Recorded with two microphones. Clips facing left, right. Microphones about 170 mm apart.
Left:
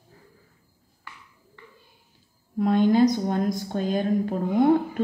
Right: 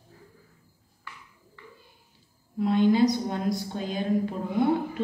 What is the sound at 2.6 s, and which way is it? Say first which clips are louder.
A woman's voice: left 2 dB; 50° left (ahead or behind).